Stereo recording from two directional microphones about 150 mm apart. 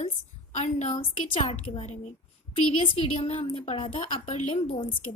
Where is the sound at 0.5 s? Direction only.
50° left (ahead or behind).